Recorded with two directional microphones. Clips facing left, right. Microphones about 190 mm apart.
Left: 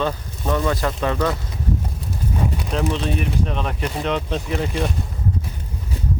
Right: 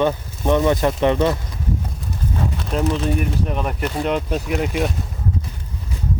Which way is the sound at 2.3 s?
10° left (ahead or behind).